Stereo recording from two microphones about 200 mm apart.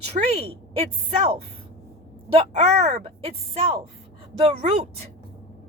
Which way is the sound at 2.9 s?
30° right (ahead or behind).